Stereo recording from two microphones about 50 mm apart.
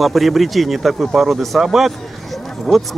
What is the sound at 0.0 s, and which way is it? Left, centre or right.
Speech, centre.